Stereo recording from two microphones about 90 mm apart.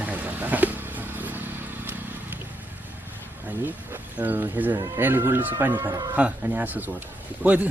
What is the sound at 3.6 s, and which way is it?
A man's voice, 20° right (ahead or behind).